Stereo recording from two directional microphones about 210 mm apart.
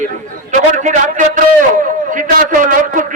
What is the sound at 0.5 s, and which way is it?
A man's voice, 35° right (ahead or behind).